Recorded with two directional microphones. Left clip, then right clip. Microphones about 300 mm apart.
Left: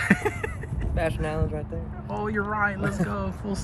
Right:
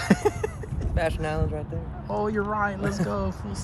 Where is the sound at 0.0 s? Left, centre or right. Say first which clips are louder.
Even; centre.